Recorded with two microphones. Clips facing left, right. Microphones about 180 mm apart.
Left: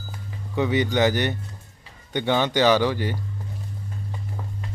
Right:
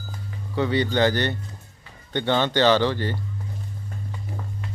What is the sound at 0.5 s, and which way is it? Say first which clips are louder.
Speech: even; 15° left (ahead or behind).